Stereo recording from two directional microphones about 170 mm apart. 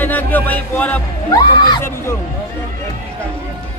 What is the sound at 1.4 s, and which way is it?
Crowd, 25° left (ahead or behind).